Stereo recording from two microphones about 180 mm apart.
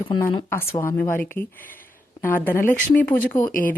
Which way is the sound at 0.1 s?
25° left (ahead or behind).